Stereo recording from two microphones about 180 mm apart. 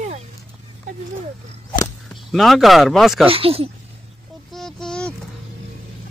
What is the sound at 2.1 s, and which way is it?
Speech, centre (ahead or behind).